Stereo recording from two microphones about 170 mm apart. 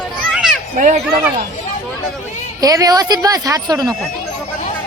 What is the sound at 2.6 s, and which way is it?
Speech, 20° right (ahead or behind).